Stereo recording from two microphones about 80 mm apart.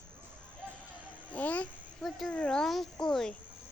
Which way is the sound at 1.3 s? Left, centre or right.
Centre.